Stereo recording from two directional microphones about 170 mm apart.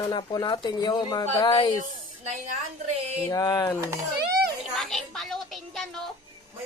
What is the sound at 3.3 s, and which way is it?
Speech, 20° left (ahead or behind).